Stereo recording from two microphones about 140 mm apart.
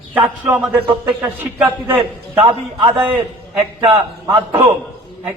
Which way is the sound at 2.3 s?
40° right (ahead or behind).